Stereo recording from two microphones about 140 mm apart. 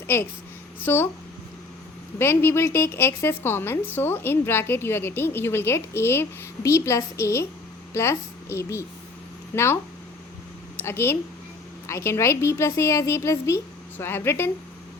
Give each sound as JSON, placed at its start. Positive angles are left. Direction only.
{"t": 0.8, "sound": "a woman's voice", "side_deg": 15}
{"t": 2.1, "sound": "a woman's voice", "side_deg": 15}
{"t": 10.8, "sound": "a woman's voice", "side_deg": 15}